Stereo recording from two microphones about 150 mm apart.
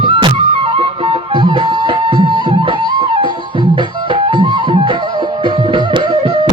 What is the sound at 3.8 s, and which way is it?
Music, 35° right (ahead or behind).